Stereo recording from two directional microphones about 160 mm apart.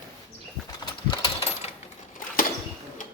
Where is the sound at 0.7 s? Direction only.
25° left (ahead or behind).